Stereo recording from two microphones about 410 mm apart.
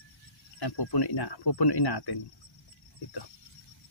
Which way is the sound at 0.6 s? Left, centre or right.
Left.